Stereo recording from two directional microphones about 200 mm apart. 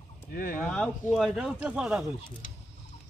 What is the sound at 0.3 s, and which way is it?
Speech, 45° left (ahead or behind).